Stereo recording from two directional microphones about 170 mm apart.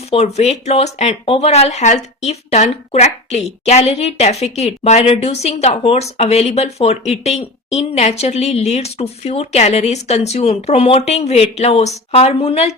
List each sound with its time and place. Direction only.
0.1 s speech: 40° left (ahead or behind)